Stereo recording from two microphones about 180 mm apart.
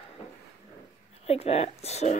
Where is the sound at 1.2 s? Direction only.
35° left (ahead or behind).